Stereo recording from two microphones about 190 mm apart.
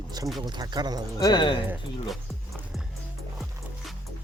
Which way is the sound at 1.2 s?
20° left (ahead or behind).